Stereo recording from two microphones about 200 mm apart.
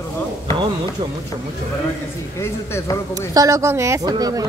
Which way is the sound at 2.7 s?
15° left (ahead or behind).